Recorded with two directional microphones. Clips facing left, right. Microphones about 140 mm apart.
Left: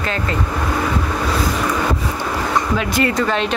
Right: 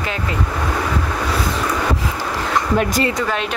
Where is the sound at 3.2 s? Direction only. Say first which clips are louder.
Left 3 dB; 5° right (ahead or behind).